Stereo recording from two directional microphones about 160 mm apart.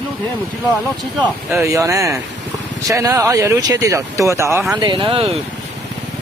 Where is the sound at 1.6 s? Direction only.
20° right (ahead or behind).